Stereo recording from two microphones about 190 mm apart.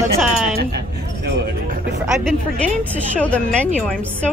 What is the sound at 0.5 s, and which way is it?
Speech, 55° right (ahead or behind).